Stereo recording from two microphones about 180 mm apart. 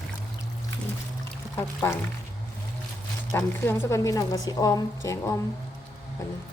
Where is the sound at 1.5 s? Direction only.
15° left (ahead or behind).